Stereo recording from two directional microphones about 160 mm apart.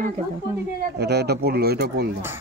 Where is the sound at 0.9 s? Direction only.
90° right.